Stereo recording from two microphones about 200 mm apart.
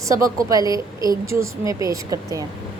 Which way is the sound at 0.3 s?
15° right (ahead or behind).